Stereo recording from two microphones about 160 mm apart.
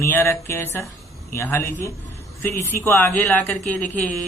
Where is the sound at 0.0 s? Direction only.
15° left (ahead or behind).